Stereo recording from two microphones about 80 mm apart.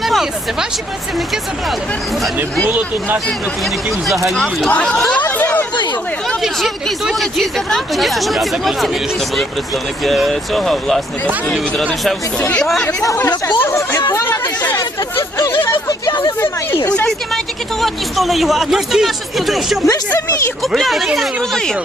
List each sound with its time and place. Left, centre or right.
0.0 s a sound: centre
2.6 s speech: right
4.7 s speech: centre
5.3 s chatter: centre
6.4 s speech: centre
10.0 s speech: centre
12.4 s speech: centre
13.6 s speech: left
17.1 s speech: centre